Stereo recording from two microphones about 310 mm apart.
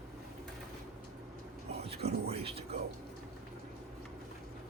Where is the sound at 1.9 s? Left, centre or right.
Centre.